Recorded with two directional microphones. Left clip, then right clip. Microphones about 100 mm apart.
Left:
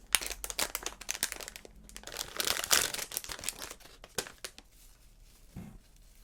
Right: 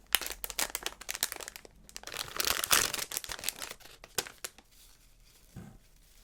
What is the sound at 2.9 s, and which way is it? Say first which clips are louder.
Crumpling: right 2 dB; 75° right (ahead or behind).